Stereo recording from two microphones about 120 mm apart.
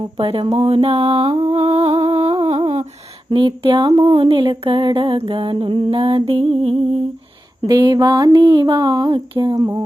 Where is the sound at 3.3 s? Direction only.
45° right (ahead or behind).